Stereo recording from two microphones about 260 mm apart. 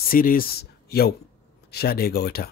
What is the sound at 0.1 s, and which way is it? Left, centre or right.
Speech, left.